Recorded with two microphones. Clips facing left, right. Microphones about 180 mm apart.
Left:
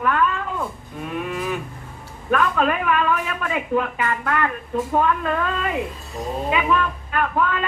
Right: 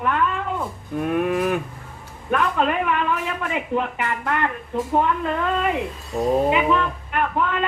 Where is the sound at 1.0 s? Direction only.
55° right (ahead or behind).